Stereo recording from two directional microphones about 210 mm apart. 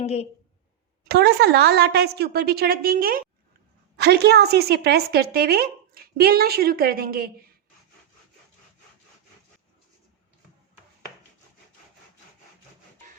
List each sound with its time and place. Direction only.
0.0 s speech: 30° left (ahead or behind)
1.0 s a woman's voice: 50° right (ahead or behind)